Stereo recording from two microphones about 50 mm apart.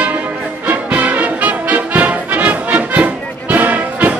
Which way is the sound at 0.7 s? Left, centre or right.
Right.